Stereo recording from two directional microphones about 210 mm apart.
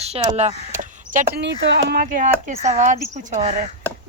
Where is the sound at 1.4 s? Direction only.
55° right (ahead or behind); by 3.7 s 35° right (ahead or behind).